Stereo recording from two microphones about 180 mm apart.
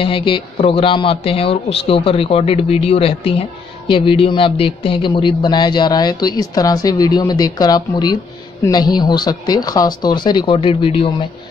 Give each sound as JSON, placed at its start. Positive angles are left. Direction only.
{"t": 0.0, "sound": "speech", "side_deg": 30}